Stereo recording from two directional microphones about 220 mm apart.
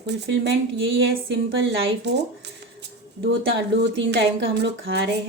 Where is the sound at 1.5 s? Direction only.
55° right (ahead or behind).